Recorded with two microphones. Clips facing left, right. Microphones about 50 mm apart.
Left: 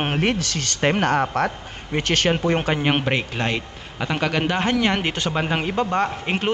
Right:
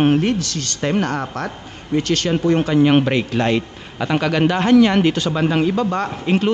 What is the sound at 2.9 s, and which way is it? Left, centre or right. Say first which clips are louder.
A man's voice: right 6 dB; centre.